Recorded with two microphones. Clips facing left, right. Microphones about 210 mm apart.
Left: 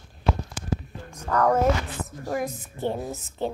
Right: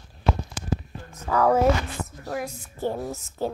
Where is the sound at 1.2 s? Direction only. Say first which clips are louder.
Right 1 dB; 5° right (ahead or behind).